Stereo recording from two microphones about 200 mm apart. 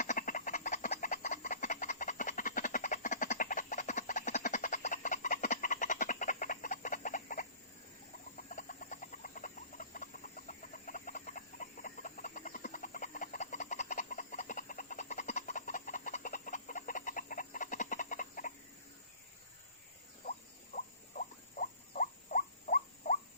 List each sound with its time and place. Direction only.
0.0 s frog: 40° left (ahead or behind)
8.4 s bird: 40° left (ahead or behind)
20.7 s rodents: 40° left (ahead or behind)